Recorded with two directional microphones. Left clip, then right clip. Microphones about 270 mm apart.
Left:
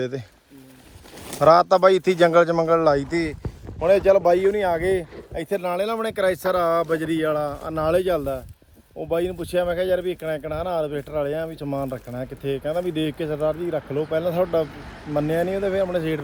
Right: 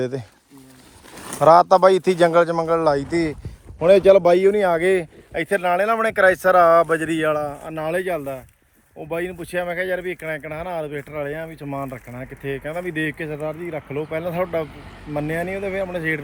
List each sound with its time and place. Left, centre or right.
0.0 s speech: centre
1.4 s speech: centre
3.8 s speech: right
5.4 s speech: centre